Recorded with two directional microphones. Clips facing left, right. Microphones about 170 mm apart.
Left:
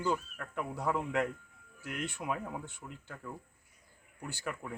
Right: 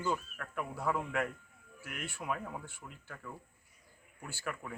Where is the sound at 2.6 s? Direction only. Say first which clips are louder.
Left 3 dB; 20° left (ahead or behind).